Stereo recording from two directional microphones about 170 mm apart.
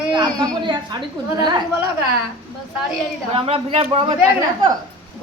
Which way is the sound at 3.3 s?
35° right (ahead or behind).